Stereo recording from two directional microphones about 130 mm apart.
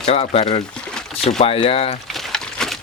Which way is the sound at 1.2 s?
50° left (ahead or behind).